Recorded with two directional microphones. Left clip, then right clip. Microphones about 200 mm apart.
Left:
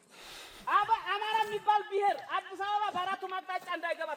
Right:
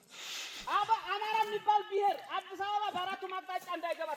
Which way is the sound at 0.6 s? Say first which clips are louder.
Left 3 dB; 20° right (ahead or behind).